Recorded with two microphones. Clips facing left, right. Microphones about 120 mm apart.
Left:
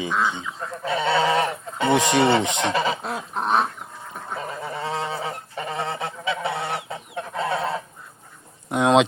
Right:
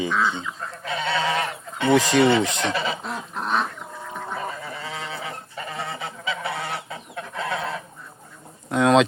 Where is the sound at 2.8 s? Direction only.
40° left (ahead or behind).